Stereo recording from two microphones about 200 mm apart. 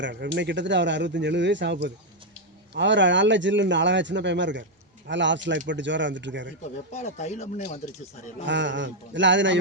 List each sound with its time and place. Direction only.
0.0 s speech: 60° right (ahead or behind)
6.9 s speech: 35° left (ahead or behind)
8.4 s speech: 65° right (ahead or behind)